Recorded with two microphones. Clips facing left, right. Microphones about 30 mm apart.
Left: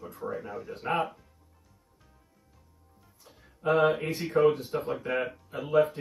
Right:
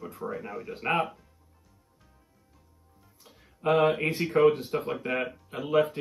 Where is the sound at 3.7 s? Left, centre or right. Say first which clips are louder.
Right 1 dB; right.